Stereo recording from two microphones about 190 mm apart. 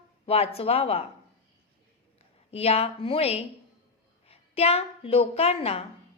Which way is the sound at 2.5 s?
30° left (ahead or behind).